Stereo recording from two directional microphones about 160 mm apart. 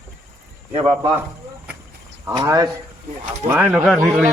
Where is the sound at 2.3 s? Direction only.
25° right (ahead or behind).